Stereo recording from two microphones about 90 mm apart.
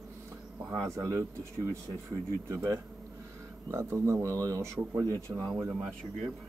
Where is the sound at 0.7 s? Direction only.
35° right (ahead or behind).